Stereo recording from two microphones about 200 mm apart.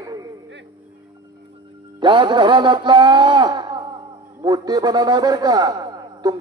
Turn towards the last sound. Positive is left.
turn(degrees=-20)  # may be behind; listen again after turning